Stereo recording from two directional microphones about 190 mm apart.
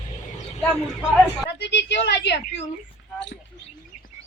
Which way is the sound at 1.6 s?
65° left (ahead or behind).